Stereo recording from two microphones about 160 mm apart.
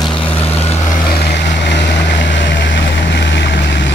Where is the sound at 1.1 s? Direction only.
90° left.